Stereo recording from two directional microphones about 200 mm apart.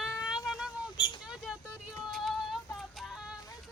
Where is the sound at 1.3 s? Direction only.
5° right (ahead or behind).